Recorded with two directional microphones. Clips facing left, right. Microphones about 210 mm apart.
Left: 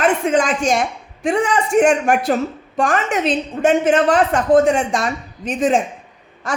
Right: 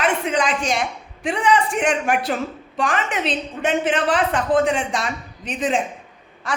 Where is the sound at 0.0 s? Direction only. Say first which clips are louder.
Left 5 dB; 45° left (ahead or behind).